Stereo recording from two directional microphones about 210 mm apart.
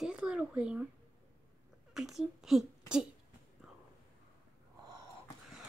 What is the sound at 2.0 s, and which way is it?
Speech, centre (ahead or behind).